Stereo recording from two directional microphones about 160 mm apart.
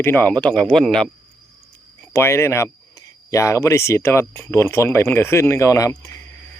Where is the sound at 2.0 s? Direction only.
15° left (ahead or behind).